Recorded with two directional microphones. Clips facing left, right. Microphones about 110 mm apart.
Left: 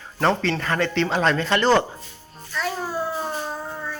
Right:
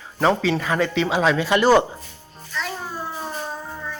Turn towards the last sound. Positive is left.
turn(degrees=0)  # may be behind; listen again after turning